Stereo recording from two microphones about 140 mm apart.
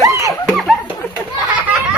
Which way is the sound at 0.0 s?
25° right (ahead or behind).